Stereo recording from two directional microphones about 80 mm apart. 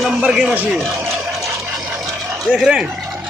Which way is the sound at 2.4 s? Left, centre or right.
Centre.